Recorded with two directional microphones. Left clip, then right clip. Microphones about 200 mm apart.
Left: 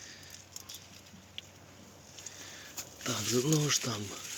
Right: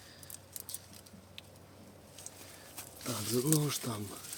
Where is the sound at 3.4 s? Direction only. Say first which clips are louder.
Left 3 dB; centre (ahead or behind).